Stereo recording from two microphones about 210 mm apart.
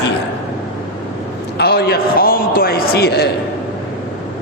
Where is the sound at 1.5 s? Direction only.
50° left (ahead or behind).